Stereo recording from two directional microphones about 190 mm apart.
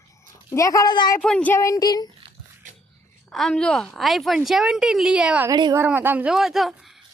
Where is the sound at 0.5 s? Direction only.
15° left (ahead or behind).